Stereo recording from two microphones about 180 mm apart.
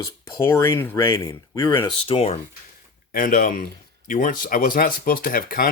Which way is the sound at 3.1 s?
50° left (ahead or behind).